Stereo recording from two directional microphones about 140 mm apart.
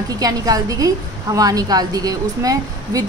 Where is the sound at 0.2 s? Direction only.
25° right (ahead or behind).